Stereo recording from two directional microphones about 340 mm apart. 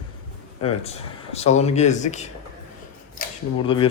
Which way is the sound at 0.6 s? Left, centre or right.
Centre.